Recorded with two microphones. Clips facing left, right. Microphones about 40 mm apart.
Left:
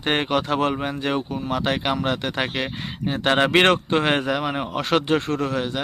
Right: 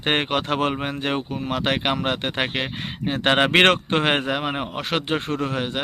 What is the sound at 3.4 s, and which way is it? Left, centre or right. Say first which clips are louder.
Speech: even; right.